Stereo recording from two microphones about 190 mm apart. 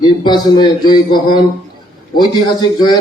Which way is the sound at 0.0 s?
20° left (ahead or behind).